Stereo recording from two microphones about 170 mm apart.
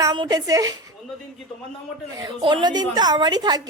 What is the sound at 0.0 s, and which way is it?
Speech, 20° right (ahead or behind).